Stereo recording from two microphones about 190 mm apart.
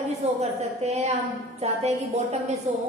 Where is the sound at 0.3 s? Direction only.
35° right (ahead or behind).